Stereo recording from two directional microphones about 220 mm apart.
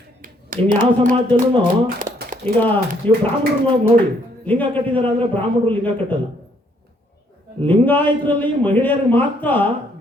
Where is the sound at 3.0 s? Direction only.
5° left (ahead or behind).